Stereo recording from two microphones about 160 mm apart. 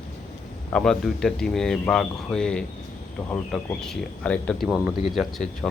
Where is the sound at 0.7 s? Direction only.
5° left (ahead or behind).